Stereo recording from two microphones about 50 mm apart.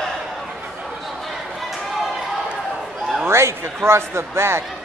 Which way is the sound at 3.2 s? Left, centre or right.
Right.